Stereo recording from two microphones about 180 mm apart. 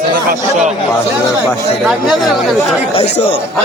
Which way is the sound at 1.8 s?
Centre (ahead or behind).